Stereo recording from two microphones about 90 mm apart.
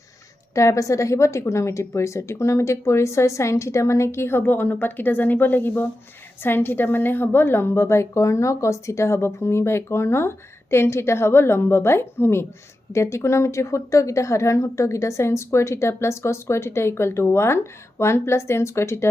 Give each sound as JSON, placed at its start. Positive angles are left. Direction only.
{"t": 0.5, "sound": "a woman's voice", "side_deg": 35}